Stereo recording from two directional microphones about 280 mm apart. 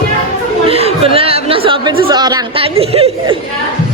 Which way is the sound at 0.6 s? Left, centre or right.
Right.